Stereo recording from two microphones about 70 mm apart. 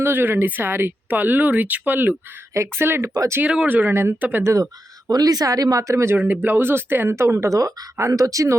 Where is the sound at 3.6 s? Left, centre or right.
Right.